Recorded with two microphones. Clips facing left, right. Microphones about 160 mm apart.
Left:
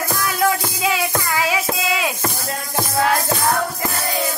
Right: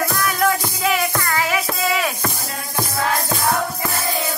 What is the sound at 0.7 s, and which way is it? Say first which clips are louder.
Music: even; 15° left (ahead or behind).